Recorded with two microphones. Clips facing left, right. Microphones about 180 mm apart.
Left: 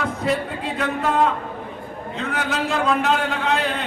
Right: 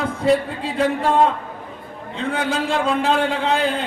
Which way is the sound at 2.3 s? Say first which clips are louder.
Right 3 dB; 30° right (ahead or behind).